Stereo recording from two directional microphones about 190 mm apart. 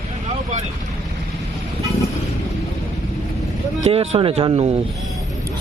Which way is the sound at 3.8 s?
35° right (ahead or behind).